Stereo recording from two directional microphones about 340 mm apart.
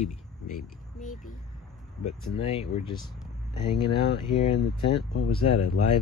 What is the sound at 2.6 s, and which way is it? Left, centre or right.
Speech, centre.